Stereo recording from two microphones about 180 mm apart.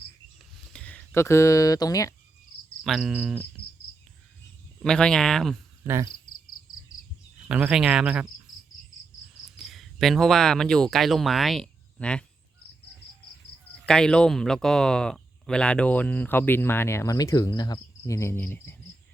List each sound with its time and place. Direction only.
0.7 s speech: 5° left (ahead or behind)
2.8 s speech: centre (ahead or behind)
4.8 s speech: 5° left (ahead or behind)
5.8 s cricket: 15° right (ahead or behind)
6.9 s cricket: 20° left (ahead or behind)
7.4 s speech: 5° right (ahead or behind)
9.6 s speech: centre (ahead or behind)
13.7 s speech: 5° left (ahead or behind)